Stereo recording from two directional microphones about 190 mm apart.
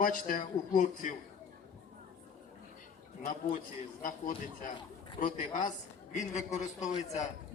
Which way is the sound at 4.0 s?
45° left (ahead or behind).